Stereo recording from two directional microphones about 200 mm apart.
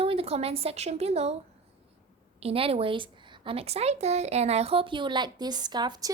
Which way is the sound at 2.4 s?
30° right (ahead or behind).